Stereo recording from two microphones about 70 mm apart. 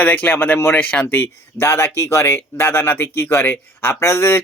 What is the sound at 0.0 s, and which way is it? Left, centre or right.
Speech, left.